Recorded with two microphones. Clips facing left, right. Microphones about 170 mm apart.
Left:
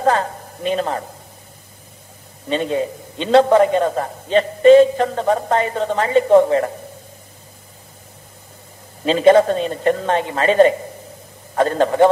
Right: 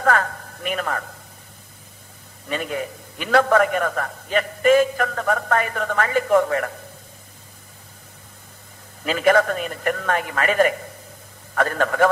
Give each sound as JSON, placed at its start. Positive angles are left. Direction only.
{"t": 0.0, "sound": "a man's voice", "side_deg": 25}
{"t": 2.4, "sound": "a man's voice", "side_deg": 25}
{"t": 9.0, "sound": "a man's voice", "side_deg": 25}